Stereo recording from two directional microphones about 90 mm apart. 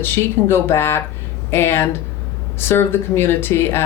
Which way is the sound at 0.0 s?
25° left (ahead or behind).